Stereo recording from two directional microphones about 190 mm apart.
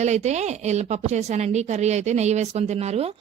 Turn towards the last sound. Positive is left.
turn(degrees=-35)  # may be behind; listen again after turning